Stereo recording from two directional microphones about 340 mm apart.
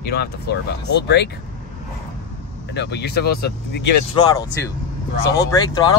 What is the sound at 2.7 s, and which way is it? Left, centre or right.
Speech, left.